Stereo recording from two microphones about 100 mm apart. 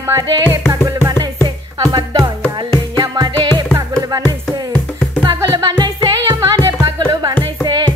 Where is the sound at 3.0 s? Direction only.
50° right (ahead or behind).